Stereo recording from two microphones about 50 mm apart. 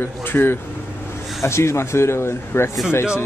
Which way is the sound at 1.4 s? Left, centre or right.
Left.